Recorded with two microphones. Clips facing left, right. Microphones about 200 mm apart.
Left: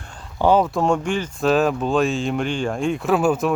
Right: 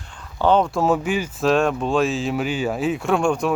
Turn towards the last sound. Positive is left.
turn(degrees=5)  # may be behind; listen again after turning